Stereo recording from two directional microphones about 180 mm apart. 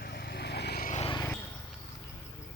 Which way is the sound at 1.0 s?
25° left (ahead or behind).